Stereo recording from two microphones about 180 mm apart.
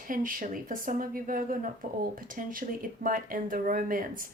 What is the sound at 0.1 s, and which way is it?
Speech, 50° right (ahead or behind).